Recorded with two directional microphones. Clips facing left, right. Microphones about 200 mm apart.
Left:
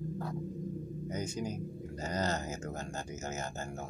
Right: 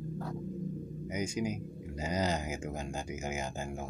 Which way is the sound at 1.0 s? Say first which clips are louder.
Right 4 dB; 10° right (ahead or behind).